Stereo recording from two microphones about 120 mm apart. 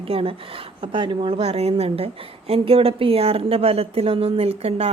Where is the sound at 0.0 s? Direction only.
50° right (ahead or behind).